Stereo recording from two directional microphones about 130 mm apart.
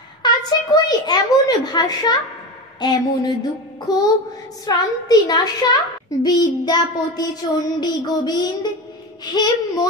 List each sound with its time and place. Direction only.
0.2 s a child's voice: 30° left (ahead or behind)